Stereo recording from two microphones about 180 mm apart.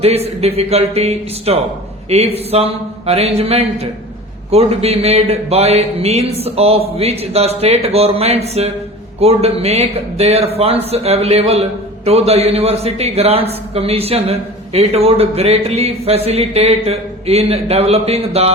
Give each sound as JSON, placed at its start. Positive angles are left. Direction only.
{"t": 0.0, "sound": "a man's voice", "side_deg": -35}